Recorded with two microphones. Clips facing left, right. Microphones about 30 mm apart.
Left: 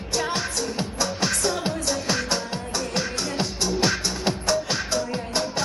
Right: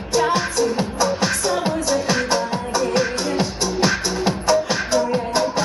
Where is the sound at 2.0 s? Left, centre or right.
Centre.